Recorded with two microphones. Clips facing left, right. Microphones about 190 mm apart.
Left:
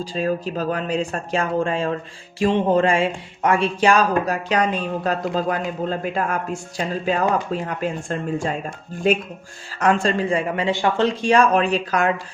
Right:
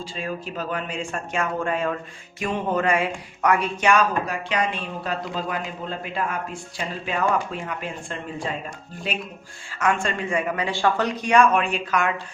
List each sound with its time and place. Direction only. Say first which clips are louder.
0.0 s speech: left 8 dB; 40° left (ahead or behind)
9.7 s speech: left 5 dB; 35° left (ahead or behind)